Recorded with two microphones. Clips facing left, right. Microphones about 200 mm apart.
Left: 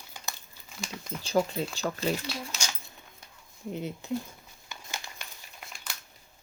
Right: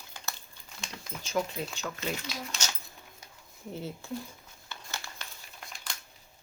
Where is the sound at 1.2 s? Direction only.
35° left (ahead or behind).